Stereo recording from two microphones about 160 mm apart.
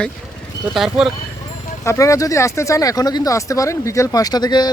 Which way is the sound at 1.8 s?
20° left (ahead or behind).